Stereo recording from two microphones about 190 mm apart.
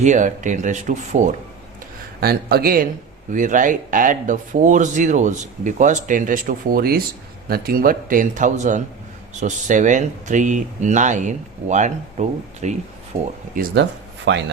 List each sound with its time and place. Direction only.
0.0 s speech: 40° right (ahead or behind)
2.2 s speech: 55° right (ahead or behind)
3.2 s speech: 40° right (ahead or behind)
14.3 s speech: 70° right (ahead or behind)